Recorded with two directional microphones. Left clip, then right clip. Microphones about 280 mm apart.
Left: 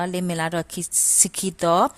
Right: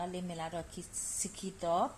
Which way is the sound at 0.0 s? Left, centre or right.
Left.